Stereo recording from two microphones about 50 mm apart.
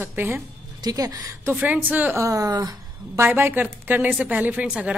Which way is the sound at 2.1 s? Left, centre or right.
Right.